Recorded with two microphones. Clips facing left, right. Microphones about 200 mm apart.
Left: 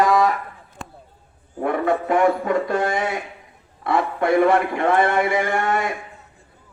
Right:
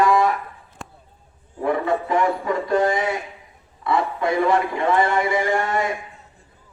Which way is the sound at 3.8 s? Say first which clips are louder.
Left 1 dB; 55° left (ahead or behind).